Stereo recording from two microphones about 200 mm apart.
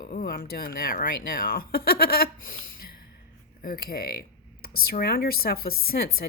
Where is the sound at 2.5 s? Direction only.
45° left (ahead or behind).